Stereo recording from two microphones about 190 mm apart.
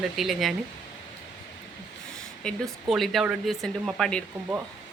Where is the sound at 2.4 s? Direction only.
Centre (ahead or behind).